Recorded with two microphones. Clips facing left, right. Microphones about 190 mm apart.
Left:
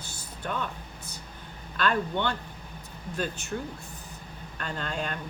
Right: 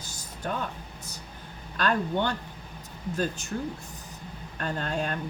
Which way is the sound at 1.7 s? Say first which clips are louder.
Right 1 dB; 40° right (ahead or behind).